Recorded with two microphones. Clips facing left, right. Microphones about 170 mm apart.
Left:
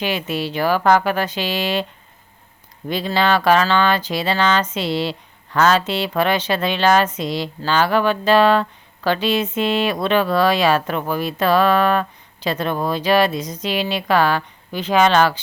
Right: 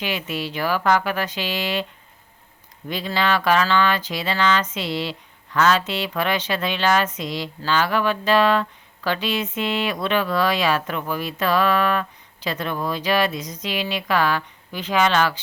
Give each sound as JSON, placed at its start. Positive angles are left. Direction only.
{"t": 0.0, "sound": "speech", "side_deg": 30}
{"t": 2.9, "sound": "speech", "side_deg": 30}